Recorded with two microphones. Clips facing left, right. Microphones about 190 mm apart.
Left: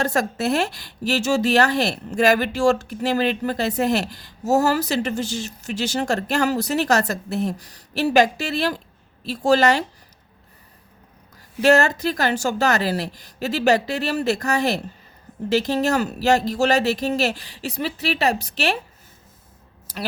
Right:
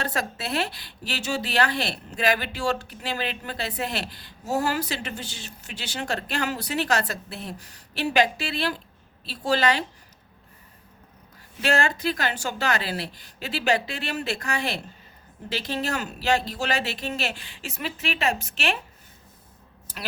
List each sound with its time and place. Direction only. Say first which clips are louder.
0.0 s a woman's voice: left 8 dB; 45° left (ahead or behind)
11.6 s a woman's voice: left 7 dB; 45° left (ahead or behind)